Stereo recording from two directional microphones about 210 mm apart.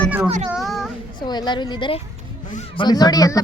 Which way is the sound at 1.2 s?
20° left (ahead or behind).